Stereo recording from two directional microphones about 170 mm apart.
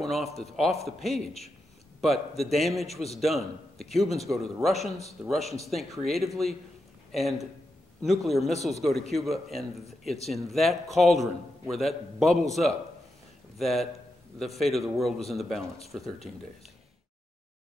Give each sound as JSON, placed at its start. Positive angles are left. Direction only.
{"t": 0.0, "sound": "a man's voice", "side_deg": 0}
{"t": 1.1, "sound": "a man's voice", "side_deg": 40}
{"t": 2.0, "sound": "a man's voice", "side_deg": 0}
{"t": 2.9, "sound": "a man's voice", "side_deg": 40}
{"t": 3.2, "sound": "a man's voice", "side_deg": 0}
{"t": 13.6, "sound": "a man's voice", "side_deg": 0}